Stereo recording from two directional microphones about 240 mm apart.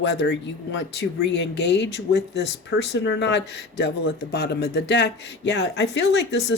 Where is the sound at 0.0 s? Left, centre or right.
Left.